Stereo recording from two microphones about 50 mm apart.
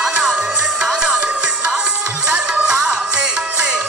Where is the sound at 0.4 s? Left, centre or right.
Right.